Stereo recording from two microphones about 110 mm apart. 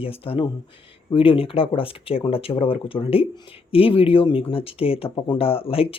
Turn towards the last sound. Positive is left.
turn(degrees=60)  # may be behind; listen again after turning